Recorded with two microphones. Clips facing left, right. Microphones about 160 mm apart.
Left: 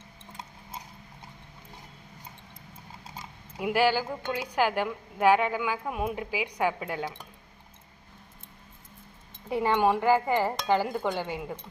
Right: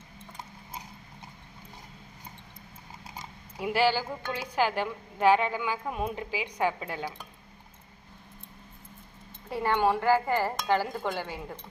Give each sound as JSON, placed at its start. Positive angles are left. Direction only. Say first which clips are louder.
{"t": 3.6, "sound": "speech", "louder": "left 1 dB", "side_deg": 10}
{"t": 9.5, "sound": "speech", "louder": "left 2 dB", "side_deg": 15}